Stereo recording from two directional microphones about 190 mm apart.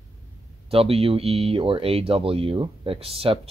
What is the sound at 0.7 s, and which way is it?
Speech, 30° right (ahead or behind).